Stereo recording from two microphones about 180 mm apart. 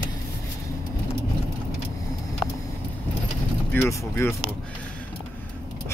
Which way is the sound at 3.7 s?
15° left (ahead or behind).